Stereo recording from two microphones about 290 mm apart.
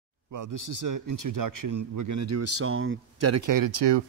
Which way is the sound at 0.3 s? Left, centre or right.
Right.